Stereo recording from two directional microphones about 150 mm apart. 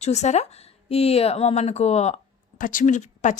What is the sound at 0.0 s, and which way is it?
A woman's voice, 45° left (ahead or behind).